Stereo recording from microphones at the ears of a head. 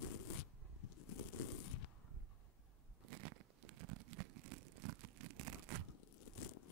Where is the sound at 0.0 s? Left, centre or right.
Left.